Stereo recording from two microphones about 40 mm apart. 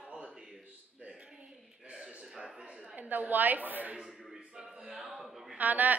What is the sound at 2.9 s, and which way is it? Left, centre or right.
A woman's voice, right.